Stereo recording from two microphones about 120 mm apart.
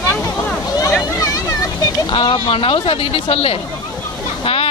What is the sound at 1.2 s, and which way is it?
Vehicle, 25° left (ahead or behind).